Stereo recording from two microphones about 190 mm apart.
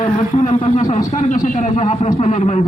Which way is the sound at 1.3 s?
40° left (ahead or behind).